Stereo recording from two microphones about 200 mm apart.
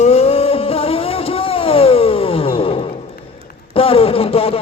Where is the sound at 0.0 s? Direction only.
30° left (ahead or behind).